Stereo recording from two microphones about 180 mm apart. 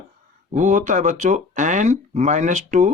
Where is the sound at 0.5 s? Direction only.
45° right (ahead or behind).